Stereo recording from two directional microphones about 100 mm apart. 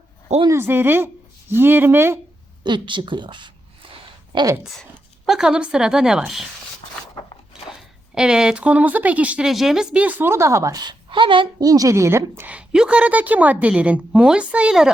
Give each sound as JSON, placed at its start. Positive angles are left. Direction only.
{"t": 0.5, "sound": "a woman's voice", "side_deg": -20}
{"t": 2.6, "sound": "speech", "side_deg": -55}
{"t": 4.8, "sound": "a woman's voice", "side_deg": 0}
{"t": 7.8, "sound": "speech", "side_deg": -5}
{"t": 9.5, "sound": "speech", "side_deg": -5}
{"t": 11.1, "sound": "a woman's voice", "side_deg": -55}
{"t": 11.6, "sound": "speech", "side_deg": -35}
{"t": 12.5, "sound": "a woman's voice", "side_deg": -10}